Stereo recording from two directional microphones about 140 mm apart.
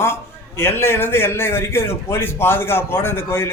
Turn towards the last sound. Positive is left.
turn(degrees=15)  # may be behind; listen again after turning